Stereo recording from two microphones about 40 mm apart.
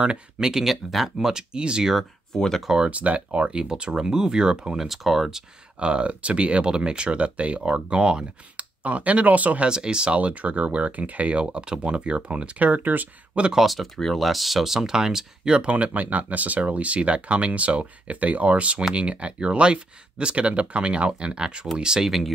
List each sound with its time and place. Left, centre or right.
0.0 s speech: right
0.7 s speech: centre
1.1 s speech: centre
2.3 s speech: centre
2.9 s speech: right; by 4.7 s centre
4.7 s speech: centre
5.8 s speech: right
8.8 s speech: right
9.7 s speech: right
11.5 s speech: right
13.6 s speech: centre; by 15.7 s right
15.7 s speech: right; by 22.1 s centre